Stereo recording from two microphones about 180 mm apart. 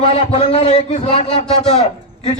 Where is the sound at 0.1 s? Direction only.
35° left (ahead or behind).